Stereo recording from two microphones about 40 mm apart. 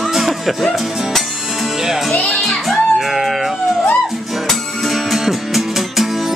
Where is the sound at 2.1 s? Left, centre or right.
Left.